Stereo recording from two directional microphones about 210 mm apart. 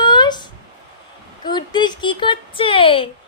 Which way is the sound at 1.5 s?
20° left (ahead or behind).